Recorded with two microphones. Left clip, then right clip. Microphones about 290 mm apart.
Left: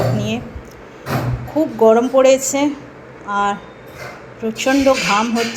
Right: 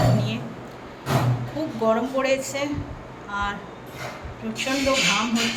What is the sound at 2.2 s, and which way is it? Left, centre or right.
A woman's voice, centre.